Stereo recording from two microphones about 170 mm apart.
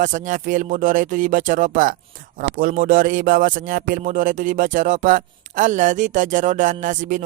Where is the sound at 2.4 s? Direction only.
55° right (ahead or behind).